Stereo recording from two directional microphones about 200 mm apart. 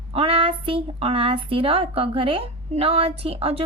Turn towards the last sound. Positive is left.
turn(degrees=-30)  # may be behind; listen again after turning